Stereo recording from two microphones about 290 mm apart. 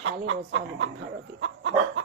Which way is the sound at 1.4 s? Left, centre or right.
Right.